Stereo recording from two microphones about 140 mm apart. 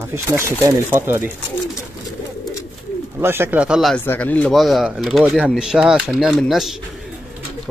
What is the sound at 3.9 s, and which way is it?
Speech, 10° left (ahead or behind).